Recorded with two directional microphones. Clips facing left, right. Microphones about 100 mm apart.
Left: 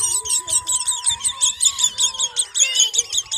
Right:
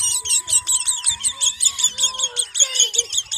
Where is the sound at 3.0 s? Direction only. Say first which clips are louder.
Even; 40° right (ahead or behind).